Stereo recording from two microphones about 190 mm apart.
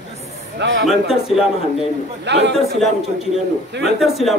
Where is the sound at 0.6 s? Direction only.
70° right (ahead or behind).